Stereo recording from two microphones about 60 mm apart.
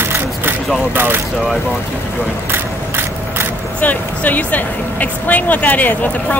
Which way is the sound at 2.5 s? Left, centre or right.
Right.